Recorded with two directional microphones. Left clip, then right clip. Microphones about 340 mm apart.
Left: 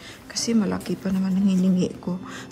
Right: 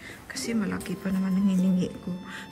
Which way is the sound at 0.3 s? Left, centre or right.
Centre.